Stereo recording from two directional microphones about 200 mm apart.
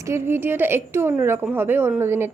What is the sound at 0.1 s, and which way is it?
A woman's voice, 10° right (ahead or behind).